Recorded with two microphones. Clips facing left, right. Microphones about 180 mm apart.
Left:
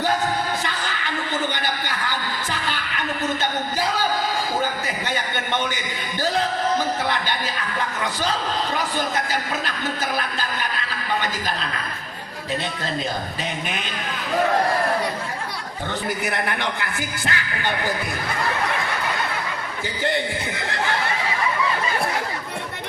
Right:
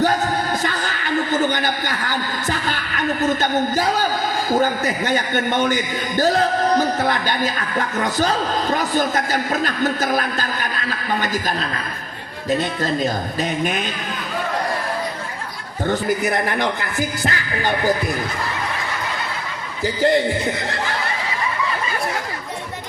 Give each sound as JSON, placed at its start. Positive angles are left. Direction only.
{"t": 0.6, "sound": "a sound", "side_deg": -45}
{"t": 4.6, "sound": "a man's voice", "side_deg": -45}
{"t": 12.5, "sound": "a man's voice", "side_deg": -45}
{"t": 15.9, "sound": "speech", "side_deg": -40}
{"t": 19.8, "sound": "speech", "side_deg": -35}